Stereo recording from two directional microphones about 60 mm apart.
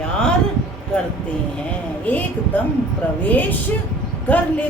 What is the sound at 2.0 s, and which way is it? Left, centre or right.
A woman's voice, left.